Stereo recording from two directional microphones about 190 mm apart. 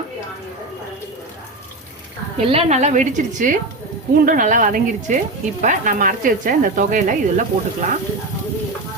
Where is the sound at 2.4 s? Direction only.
35° right (ahead or behind).